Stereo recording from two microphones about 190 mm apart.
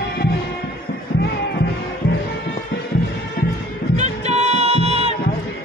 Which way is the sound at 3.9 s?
35° right (ahead or behind).